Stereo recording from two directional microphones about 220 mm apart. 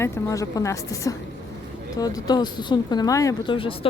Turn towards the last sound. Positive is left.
turn(degrees=25)  # may be behind; listen again after turning